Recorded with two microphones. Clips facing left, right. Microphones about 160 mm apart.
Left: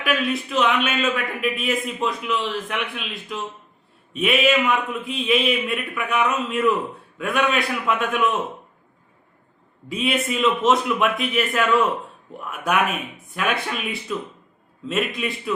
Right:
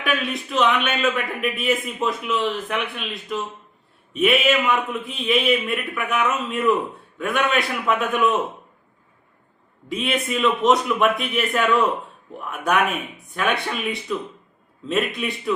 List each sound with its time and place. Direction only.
0.0 s a man's voice: centre (ahead or behind)
9.9 s a man's voice: centre (ahead or behind)